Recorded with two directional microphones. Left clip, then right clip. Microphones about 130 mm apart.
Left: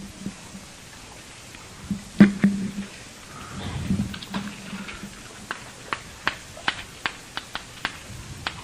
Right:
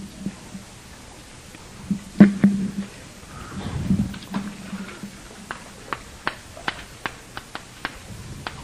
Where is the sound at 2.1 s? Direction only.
40° right (ahead or behind).